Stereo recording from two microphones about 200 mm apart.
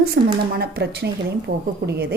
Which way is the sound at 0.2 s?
50° right (ahead or behind).